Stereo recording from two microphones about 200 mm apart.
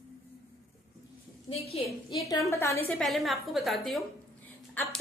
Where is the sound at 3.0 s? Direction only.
Centre (ahead or behind).